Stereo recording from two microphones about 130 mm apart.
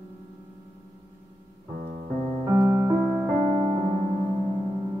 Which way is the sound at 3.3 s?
40° right (ahead or behind).